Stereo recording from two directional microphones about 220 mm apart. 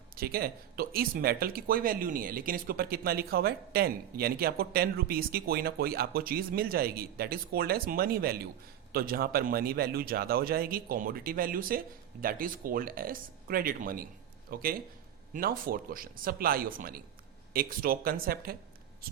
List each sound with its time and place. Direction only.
0.2 s speech: 45° right (ahead or behind)